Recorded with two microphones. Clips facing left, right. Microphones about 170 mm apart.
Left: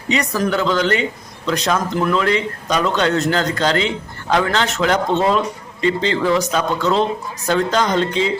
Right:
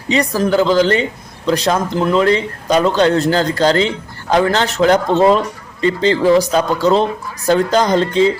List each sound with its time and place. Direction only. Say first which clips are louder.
0.1 s speech: right 4 dB; 30° right (ahead or behind)